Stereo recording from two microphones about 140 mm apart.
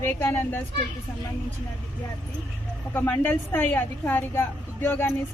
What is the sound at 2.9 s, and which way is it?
A woman's voice, 15° left (ahead or behind).